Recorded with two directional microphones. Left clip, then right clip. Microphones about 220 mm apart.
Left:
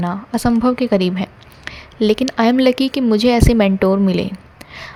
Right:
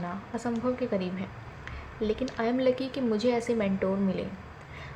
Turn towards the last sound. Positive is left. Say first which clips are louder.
# left 14 dB
turn(degrees=55)  # may be behind; listen again after turning